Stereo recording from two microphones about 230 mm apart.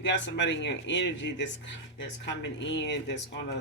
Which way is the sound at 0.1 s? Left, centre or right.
Left.